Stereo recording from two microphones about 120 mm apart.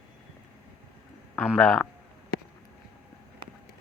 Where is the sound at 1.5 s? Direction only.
5° left (ahead or behind).